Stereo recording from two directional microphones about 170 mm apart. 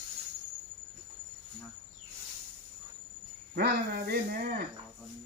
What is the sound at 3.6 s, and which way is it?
Speech, 65° right (ahead or behind).